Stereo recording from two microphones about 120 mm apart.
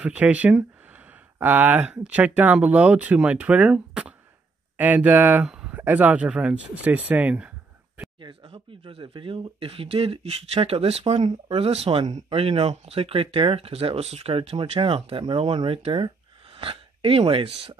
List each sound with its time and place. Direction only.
0.0 s speech: 10° right (ahead or behind)
8.2 s speech: 45° right (ahead or behind); by 11.3 s 65° right (ahead or behind)
11.4 s speech: 50° right (ahead or behind)